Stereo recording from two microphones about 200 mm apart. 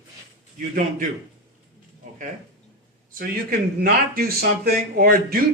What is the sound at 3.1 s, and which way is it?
Speech, 45° right (ahead or behind).